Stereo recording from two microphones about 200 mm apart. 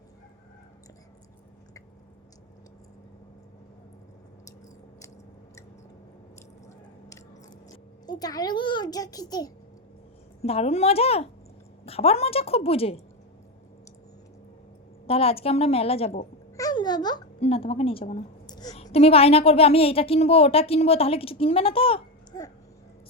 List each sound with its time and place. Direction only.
8.0 s a child's voice: 20° left (ahead or behind)
10.4 s a child's voice: 30° left (ahead or behind)
15.0 s a child's voice: 30° left (ahead or behind)
16.6 s a sound: 20° left (ahead or behind)
17.4 s a child's voice: 30° left (ahead or behind)
18.4 s a sound: 20° left (ahead or behind)
18.7 s a woman's voice: 30° left (ahead or behind)